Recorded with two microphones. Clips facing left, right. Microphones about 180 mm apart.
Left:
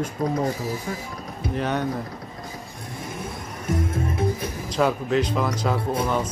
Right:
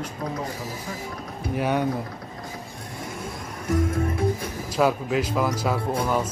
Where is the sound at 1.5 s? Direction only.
10° right (ahead or behind).